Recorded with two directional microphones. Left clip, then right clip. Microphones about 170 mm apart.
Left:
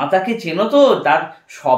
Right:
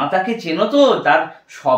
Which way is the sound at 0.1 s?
25° left (ahead or behind).